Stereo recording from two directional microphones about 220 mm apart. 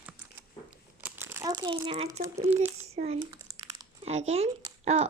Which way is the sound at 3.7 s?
25° right (ahead or behind).